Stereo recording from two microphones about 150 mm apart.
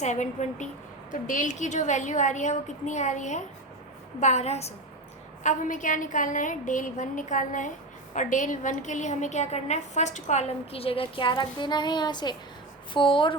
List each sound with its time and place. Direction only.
0.0 s a woman's voice: 50° left (ahead or behind)
5.4 s a woman's voice: 60° left (ahead or behind); by 13.3 s 35° left (ahead or behind)